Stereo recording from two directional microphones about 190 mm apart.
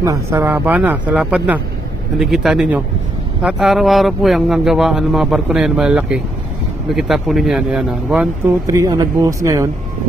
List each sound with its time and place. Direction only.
0.0 s speech: 15° right (ahead or behind)
8.6 s speech: 20° right (ahead or behind)